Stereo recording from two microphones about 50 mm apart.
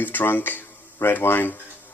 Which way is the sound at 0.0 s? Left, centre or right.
Left.